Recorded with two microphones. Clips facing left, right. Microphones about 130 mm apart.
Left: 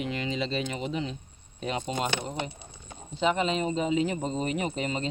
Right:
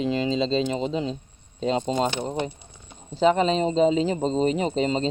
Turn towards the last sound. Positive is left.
turn(degrees=-25)  # may be behind; listen again after turning